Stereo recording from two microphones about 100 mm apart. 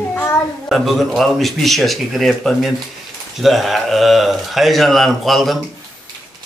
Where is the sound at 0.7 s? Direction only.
Centre (ahead or behind).